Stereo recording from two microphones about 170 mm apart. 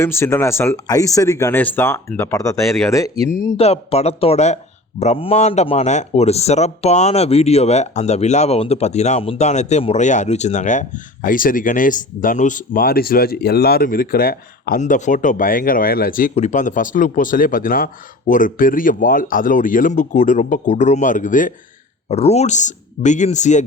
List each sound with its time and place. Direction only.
0.0 s speech: 15° left (ahead or behind)
3.6 s speech: 40° left (ahead or behind); by 14.8 s 60° left (ahead or behind)
14.8 s speech: 45° left (ahead or behind)
16.3 s speech: 45° left (ahead or behind)
22.1 s speech: 40° left (ahead or behind)